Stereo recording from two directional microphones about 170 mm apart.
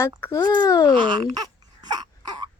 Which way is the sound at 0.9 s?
30° right (ahead or behind).